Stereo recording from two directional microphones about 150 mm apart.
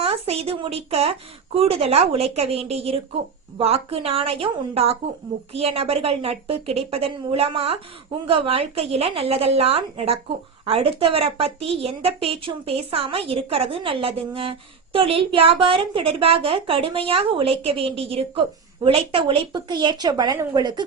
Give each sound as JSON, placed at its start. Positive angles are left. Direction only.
{"t": 0.0, "sound": "a woman's voice", "side_deg": -40}